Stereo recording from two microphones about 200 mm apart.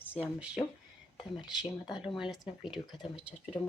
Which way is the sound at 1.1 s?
25° left (ahead or behind).